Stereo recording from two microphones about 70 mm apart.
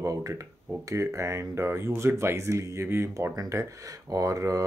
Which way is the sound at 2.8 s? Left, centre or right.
Right.